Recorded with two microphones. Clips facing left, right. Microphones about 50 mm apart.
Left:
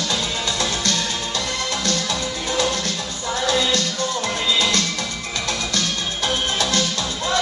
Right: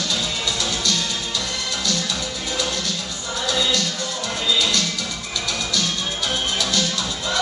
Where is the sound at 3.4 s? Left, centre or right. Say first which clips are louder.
Left 2 dB; left.